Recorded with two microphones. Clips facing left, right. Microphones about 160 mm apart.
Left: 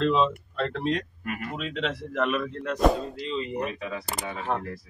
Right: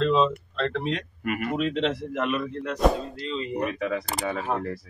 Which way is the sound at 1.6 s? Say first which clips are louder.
Right 6 dB; 30° right (ahead or behind).